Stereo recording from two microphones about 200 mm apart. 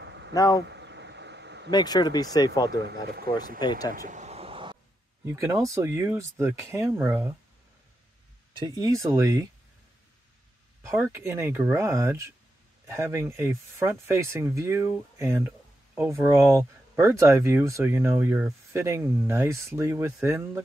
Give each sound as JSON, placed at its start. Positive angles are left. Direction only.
{"t": 0.0, "sound": "vehicle", "side_deg": -60}
{"t": 0.3, "sound": "speech", "side_deg": 20}
{"t": 0.7, "sound": "a sound", "side_deg": -60}
{"t": 1.7, "sound": "speech", "side_deg": 20}
{"t": 2.7, "sound": "speech", "side_deg": -55}
{"t": 3.5, "sound": "speech", "side_deg": 20}
{"t": 3.9, "sound": "a sound", "side_deg": -40}
{"t": 5.2, "sound": "speech", "side_deg": -15}
{"t": 8.5, "sound": "speech", "side_deg": -15}
{"t": 10.8, "sound": "speech", "side_deg": -15}